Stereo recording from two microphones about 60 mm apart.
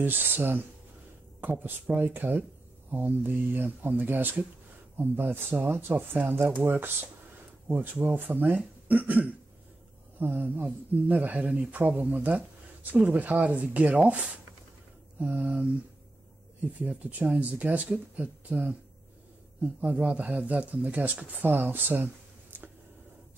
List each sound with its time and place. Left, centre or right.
0.0 s speech: right
15.1 s mantra: right
15.4 s a sound: centre
16.8 s speech: right
19.8 s speech: right